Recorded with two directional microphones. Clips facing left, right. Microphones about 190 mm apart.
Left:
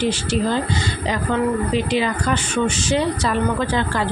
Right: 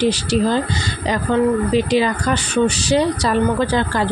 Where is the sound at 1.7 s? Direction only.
40° right (ahead or behind).